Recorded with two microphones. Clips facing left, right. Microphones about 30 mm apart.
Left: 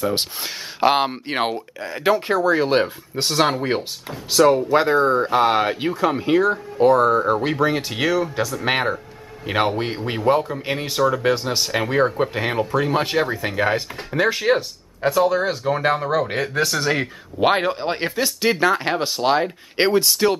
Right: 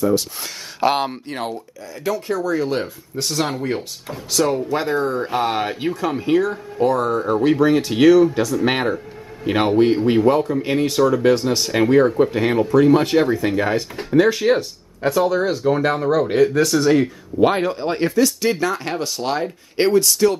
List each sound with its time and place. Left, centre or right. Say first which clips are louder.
0.0 s speech: right 4 dB; left
0.4 s speech: left 1 dB; centre
1.2 s speech: left 4 dB; left
4.3 s speech: left 4 dB; centre